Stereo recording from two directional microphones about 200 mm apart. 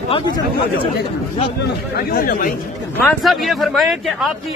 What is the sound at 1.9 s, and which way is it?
Speech, 50° left (ahead or behind).